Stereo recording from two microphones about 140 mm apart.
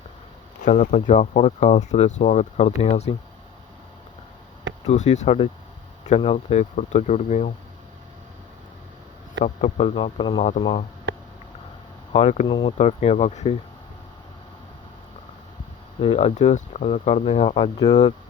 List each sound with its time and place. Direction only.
0.6 s speech: 60° left (ahead or behind)
4.9 s speech: 55° left (ahead or behind)
9.4 s speech: 60° left (ahead or behind); by 10.4 s 35° left (ahead or behind)
12.1 s speech: 55° left (ahead or behind)
16.0 s speech: 45° left (ahead or behind)